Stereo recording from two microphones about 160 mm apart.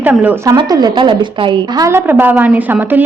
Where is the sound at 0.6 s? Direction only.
25° right (ahead or behind).